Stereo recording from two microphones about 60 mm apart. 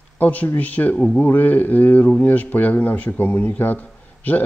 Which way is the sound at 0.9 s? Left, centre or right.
Centre.